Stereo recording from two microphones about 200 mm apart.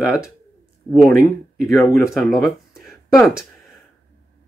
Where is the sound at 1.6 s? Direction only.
15° left (ahead or behind).